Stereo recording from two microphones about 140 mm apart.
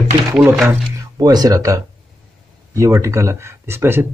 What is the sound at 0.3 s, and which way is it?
Speech, 20° right (ahead or behind).